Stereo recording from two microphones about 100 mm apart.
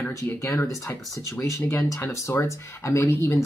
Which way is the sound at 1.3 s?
20° left (ahead or behind).